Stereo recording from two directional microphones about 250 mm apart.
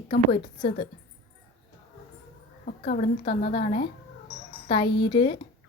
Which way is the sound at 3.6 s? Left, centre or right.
Left.